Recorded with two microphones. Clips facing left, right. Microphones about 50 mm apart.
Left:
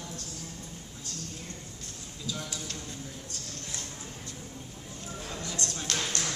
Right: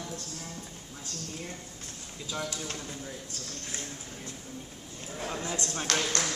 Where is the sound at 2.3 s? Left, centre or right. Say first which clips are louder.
Right 3 dB; right.